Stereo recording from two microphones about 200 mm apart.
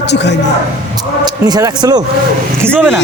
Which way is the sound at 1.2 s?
20° right (ahead or behind).